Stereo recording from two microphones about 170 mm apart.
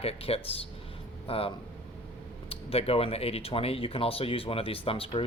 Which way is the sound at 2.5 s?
35° left (ahead or behind).